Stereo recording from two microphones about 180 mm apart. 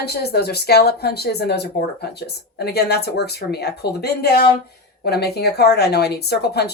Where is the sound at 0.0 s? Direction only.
60° left (ahead or behind).